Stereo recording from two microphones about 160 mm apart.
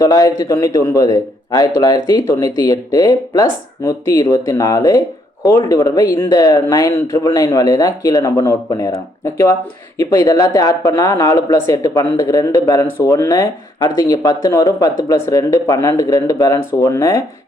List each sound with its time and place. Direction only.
0.0 s speech: 20° left (ahead or behind)